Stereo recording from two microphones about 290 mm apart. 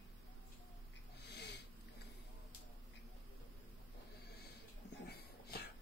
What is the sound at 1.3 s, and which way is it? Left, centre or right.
Sniff, left.